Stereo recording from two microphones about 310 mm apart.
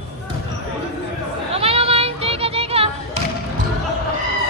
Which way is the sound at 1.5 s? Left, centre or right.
Centre.